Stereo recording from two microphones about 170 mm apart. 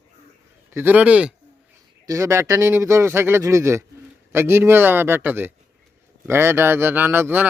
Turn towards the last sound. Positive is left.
turn(degrees=-10)  # may be behind; listen again after turning